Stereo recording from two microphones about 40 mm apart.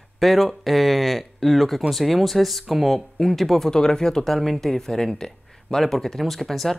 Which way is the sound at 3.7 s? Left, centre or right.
Centre.